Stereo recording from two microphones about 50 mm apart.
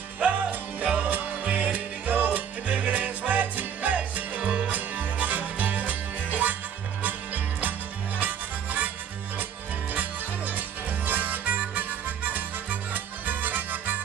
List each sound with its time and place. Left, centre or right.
0.2 s music: right
9.9 s music: right